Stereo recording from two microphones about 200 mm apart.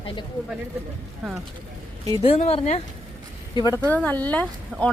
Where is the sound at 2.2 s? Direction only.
35° left (ahead or behind).